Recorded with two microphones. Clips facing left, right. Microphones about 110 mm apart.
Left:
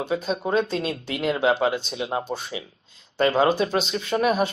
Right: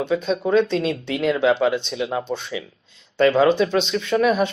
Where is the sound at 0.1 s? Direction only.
40° left (ahead or behind).